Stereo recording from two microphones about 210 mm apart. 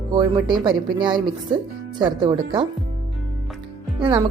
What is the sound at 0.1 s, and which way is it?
Speech, 20° right (ahead or behind).